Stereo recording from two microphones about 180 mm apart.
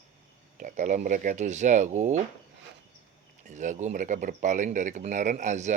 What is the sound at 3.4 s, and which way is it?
Speech, 45° right (ahead or behind).